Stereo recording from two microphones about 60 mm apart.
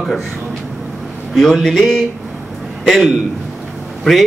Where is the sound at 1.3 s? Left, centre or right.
Centre.